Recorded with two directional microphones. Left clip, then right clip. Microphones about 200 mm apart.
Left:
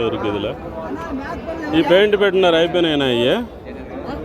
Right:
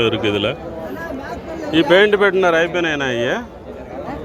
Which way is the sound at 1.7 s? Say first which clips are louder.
Right 1 dB; 5° left (ahead or behind).